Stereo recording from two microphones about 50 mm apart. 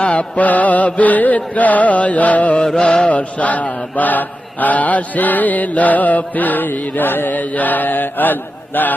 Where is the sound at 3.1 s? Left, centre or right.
Left.